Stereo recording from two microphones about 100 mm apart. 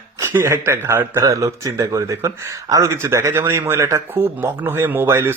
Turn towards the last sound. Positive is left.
turn(degrees=-25)  # may be behind; listen again after turning